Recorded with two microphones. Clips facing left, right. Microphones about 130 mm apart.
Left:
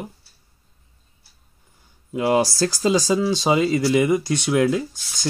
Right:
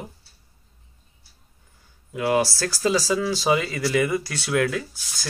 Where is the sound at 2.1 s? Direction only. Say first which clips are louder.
Left 3 dB; 25° left (ahead or behind).